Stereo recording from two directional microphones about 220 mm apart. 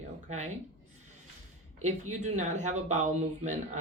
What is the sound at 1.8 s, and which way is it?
Speech, 30° right (ahead or behind).